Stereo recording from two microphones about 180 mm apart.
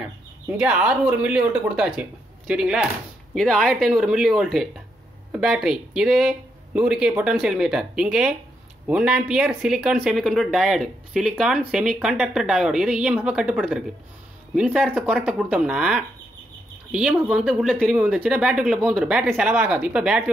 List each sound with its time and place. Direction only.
0.0 s speech: 5° right (ahead or behind)